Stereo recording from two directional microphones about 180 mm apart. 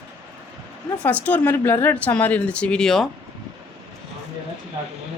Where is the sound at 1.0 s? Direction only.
10° left (ahead or behind).